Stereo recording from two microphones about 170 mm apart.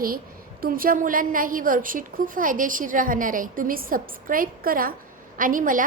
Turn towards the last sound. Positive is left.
turn(degrees=-50)  # may be behind; listen again after turning